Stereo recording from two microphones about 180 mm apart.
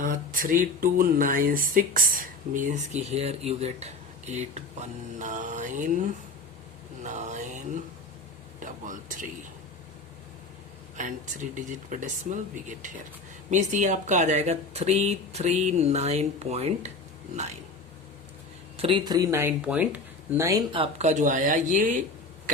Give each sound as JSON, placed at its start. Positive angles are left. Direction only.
{"t": 0.0, "sound": "speech", "side_deg": -50}
{"t": 8.6, "sound": "speech", "side_deg": -45}
{"t": 10.9, "sound": "speech", "side_deg": -45}
{"t": 13.5, "sound": "speech", "side_deg": -45}
{"t": 18.8, "sound": "speech", "side_deg": -30}
{"t": 21.0, "sound": "speech", "side_deg": -40}